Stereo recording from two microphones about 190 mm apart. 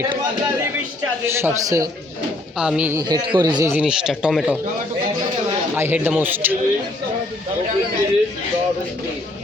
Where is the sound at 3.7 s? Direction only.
5° right (ahead or behind).